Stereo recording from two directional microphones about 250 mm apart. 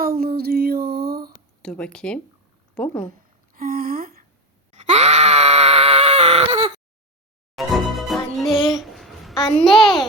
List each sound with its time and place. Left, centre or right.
0.0 s a sound: right
1.6 s a child's voice: centre
3.1 s speech: right
4.7 s groan: right
7.5 s music: centre
8.6 s a sound: centre
9.4 s a child's voice: centre